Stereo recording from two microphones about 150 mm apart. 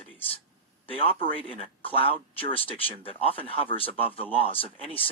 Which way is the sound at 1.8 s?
40° left (ahead or behind).